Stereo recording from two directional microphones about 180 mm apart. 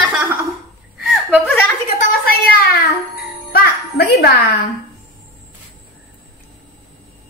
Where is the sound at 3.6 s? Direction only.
60° left (ahead or behind).